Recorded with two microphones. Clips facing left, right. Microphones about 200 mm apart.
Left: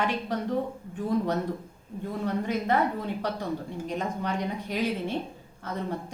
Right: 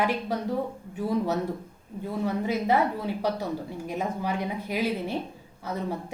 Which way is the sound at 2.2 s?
10° right (ahead or behind).